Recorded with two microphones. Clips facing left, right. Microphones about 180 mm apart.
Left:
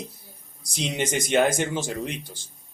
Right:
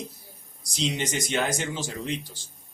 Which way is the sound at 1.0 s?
50° left (ahead or behind).